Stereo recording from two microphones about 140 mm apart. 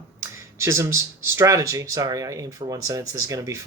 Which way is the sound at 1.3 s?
20° right (ahead or behind).